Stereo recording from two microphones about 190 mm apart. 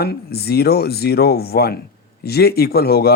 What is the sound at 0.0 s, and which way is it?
Speech, 55° left (ahead or behind).